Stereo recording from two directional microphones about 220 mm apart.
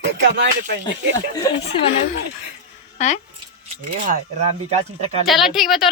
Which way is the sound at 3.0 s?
35° left (ahead or behind).